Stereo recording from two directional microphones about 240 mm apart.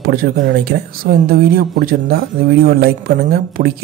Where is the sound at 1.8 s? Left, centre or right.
Right.